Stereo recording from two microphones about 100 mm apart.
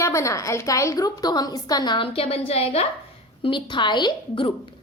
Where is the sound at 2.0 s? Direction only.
70° left (ahead or behind).